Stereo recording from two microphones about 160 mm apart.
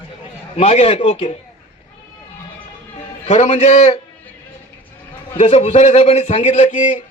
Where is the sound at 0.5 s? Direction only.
40° left (ahead or behind).